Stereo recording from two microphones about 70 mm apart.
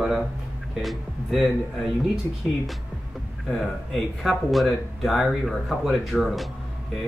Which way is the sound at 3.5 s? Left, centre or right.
Centre.